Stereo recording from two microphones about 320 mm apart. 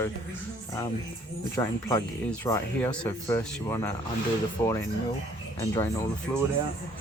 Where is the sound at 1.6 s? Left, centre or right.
Centre.